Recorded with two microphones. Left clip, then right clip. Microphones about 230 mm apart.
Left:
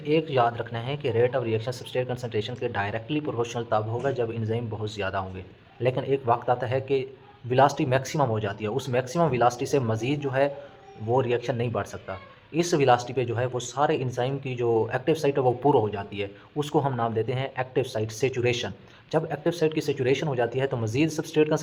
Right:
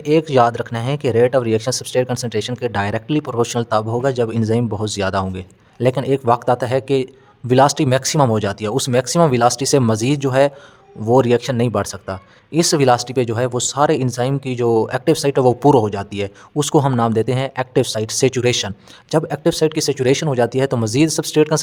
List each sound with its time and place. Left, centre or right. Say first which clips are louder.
0.0 s speech: right 9 dB; right